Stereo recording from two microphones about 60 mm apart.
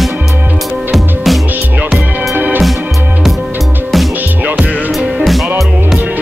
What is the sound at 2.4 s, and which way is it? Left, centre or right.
Music, right.